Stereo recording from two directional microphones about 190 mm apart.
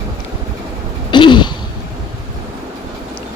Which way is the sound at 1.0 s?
25° left (ahead or behind).